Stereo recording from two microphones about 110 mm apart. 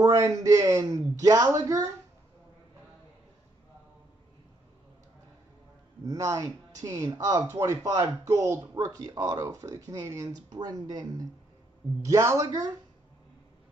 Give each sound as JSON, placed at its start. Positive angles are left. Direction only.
{"t": 0.0, "sound": "a man's voice", "side_deg": -30}
{"t": 6.0, "sound": "a man's voice", "side_deg": -30}
{"t": 12.4, "sound": "speech", "side_deg": -40}